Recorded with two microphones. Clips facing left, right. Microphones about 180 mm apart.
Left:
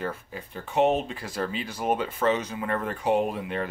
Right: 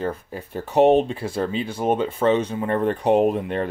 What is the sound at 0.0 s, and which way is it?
Speech, 35° right (ahead or behind).